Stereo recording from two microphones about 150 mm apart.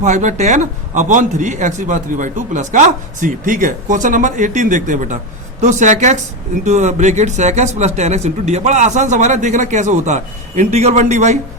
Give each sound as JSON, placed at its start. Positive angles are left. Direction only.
{"t": 0.0, "sound": "a man's voice", "side_deg": -50}